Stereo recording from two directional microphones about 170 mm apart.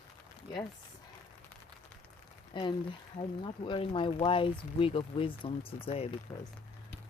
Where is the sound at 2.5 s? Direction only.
30° left (ahead or behind).